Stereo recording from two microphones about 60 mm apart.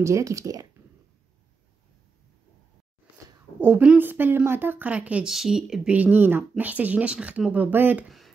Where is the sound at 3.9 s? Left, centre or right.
Right.